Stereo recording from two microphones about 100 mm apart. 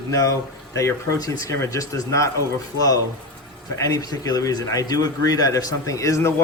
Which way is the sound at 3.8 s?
35° left (ahead or behind).